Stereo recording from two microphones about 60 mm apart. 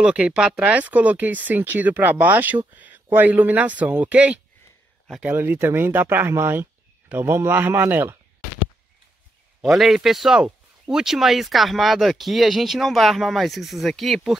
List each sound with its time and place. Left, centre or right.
0.0 s speech: right
5.4 s speech: right
9.6 s speech: centre